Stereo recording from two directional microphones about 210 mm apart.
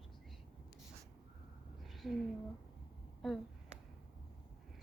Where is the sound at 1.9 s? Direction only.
Centre (ahead or behind).